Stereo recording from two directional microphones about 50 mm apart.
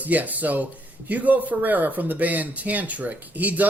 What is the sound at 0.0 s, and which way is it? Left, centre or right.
Speech, right.